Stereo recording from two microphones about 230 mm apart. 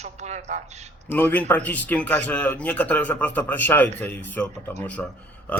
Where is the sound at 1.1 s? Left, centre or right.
Centre.